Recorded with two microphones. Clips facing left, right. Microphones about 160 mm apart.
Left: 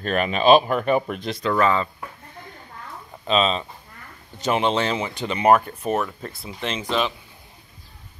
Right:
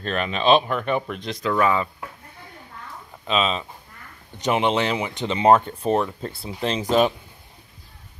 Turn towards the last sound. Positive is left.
turn(degrees=-45)  # may be behind; listen again after turning